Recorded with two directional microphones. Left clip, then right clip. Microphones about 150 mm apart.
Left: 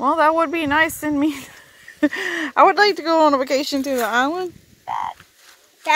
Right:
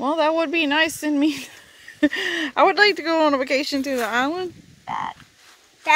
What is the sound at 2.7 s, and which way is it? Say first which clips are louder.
A woman's voice: left 2 dB; 20° left (ahead or behind).